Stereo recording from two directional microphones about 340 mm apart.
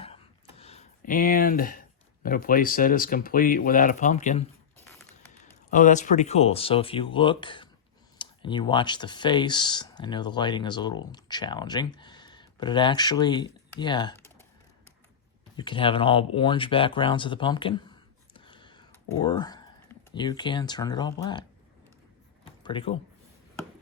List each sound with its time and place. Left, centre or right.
0.6 s speech: centre
5.7 s speech: left
15.5 s speech: centre
22.6 s speech: centre